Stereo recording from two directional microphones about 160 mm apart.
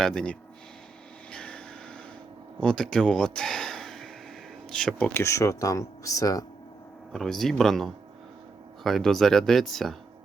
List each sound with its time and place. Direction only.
0.0 s speech: 5° left (ahead or behind)
1.3 s vehicle: 5° left (ahead or behind)
2.6 s speech: 5° left (ahead or behind); by 6.4 s 20° left (ahead or behind)
7.1 s speech: centre (ahead or behind)